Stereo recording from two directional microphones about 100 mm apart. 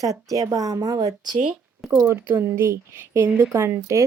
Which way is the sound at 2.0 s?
20° right (ahead or behind).